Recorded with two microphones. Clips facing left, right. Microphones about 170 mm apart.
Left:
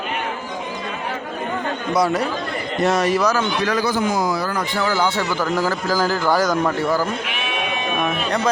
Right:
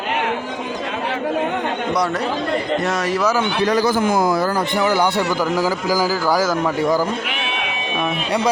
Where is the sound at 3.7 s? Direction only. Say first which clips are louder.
Right 3 dB; 40° right (ahead or behind).